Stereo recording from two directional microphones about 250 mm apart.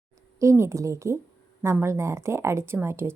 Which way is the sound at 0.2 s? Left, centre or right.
Centre.